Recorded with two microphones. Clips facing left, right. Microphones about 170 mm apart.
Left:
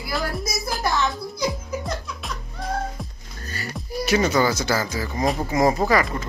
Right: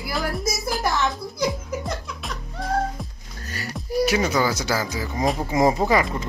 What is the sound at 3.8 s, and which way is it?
Speech, 10° right (ahead or behind).